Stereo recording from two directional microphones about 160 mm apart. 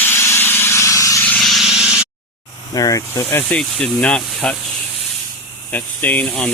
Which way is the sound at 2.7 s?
20° left (ahead or behind).